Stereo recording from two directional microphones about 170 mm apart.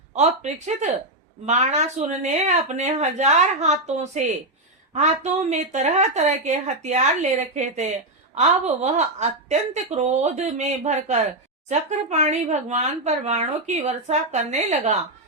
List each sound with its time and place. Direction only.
0.1 s a woman's voice: 40° right (ahead or behind)